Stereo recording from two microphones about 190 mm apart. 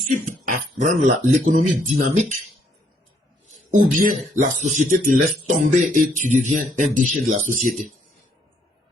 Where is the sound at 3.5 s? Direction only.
45° right (ahead or behind).